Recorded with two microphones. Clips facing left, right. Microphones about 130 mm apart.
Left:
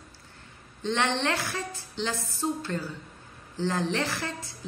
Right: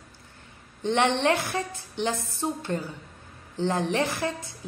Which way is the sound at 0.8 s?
15° right (ahead or behind).